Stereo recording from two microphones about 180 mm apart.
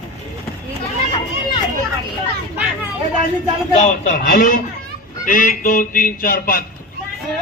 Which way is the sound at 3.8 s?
45° left (ahead or behind).